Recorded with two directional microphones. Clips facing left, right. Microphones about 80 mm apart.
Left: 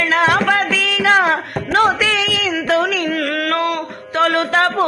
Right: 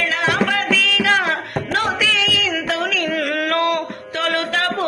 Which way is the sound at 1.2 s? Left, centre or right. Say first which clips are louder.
Left 4 dB; left.